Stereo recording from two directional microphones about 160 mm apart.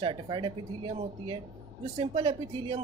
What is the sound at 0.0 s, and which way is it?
A man's voice, 30° right (ahead or behind).